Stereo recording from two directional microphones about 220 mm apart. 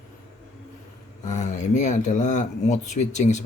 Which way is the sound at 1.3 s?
35° left (ahead or behind).